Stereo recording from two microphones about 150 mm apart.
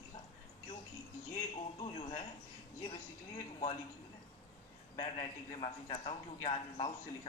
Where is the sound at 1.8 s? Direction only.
40° left (ahead or behind).